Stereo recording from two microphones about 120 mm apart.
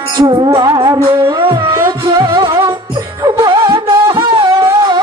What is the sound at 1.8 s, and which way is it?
Music, 25° right (ahead or behind).